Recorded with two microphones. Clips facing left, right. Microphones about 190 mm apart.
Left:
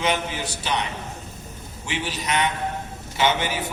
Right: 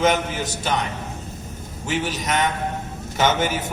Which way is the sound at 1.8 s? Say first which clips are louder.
Right 4 dB; 45° right (ahead or behind).